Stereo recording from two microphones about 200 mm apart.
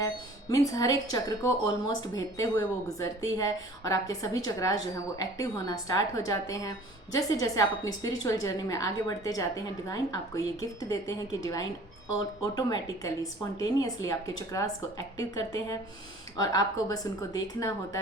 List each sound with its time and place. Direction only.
0.0 s speech: 15° left (ahead or behind)